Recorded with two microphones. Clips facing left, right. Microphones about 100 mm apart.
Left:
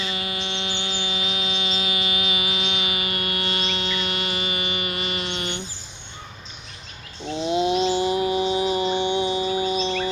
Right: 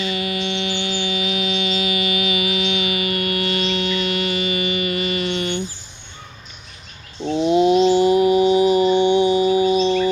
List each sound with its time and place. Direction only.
0.0 s music: 25° left (ahead or behind)
7.4 s a sound: 30° right (ahead or behind)
9.6 s singing bowl: 25° right (ahead or behind)